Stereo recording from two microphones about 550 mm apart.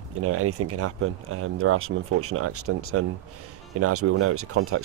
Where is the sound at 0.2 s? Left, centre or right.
Right.